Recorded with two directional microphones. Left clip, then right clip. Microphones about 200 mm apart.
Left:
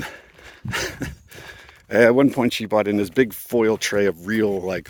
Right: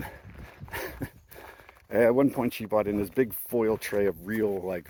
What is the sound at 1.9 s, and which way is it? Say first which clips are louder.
Speech: left 7 dB; 60° left (ahead or behind).